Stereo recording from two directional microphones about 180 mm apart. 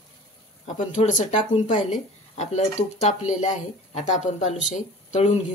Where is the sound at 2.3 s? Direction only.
40° left (ahead or behind).